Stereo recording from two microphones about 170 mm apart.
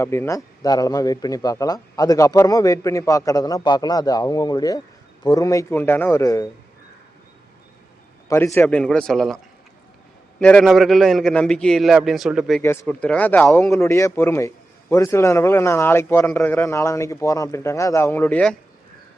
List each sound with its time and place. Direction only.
0.0 s a man's voice: 15° left (ahead or behind)
8.5 s a man's voice: 5° left (ahead or behind)
10.4 s a man's voice: 5° left (ahead or behind)